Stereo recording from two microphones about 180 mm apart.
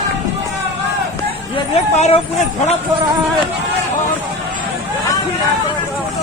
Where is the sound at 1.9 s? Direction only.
40° left (ahead or behind).